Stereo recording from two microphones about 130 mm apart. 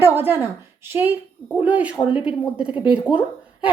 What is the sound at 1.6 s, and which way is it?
A woman's voice, 10° right (ahead or behind).